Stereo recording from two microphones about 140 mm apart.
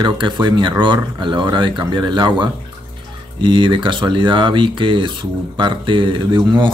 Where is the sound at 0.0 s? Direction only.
30° right (ahead or behind).